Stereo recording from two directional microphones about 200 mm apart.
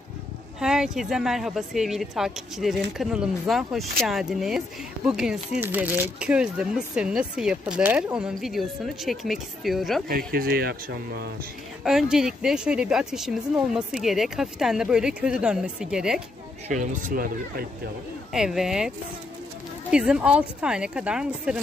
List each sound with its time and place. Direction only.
0.6 s speech: 5° right (ahead or behind)
10.0 s speech: 45° right (ahead or behind)
11.8 s speech: centre (ahead or behind)
16.7 s speech: 40° right (ahead or behind)
18.3 s speech: centre (ahead or behind)